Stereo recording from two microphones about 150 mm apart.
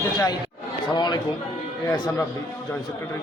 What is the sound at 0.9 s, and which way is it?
A man's voice, 30° left (ahead or behind).